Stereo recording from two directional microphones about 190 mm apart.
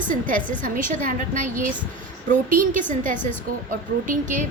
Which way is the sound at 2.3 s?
45° right (ahead or behind).